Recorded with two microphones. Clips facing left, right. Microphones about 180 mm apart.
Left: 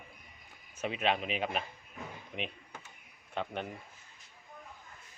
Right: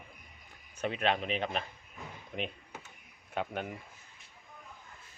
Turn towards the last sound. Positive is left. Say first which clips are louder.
# right 1 dB
turn(degrees=-5)  # may be behind; listen again after turning